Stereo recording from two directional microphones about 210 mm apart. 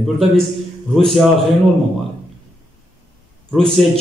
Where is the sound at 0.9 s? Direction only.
Centre (ahead or behind).